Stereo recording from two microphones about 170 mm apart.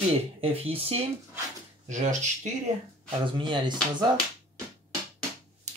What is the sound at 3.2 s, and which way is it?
Speech, 30° right (ahead or behind).